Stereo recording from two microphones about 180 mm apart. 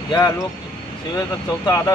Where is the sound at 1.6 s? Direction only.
20° left (ahead or behind).